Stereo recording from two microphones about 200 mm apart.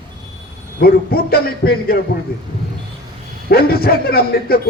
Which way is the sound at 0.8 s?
50° left (ahead or behind).